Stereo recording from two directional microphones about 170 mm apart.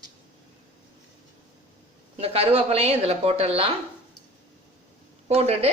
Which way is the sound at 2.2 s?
35° right (ahead or behind).